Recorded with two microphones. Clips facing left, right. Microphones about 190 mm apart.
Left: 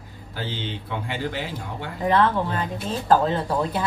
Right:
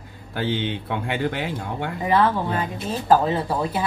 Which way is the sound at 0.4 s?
60° right (ahead or behind).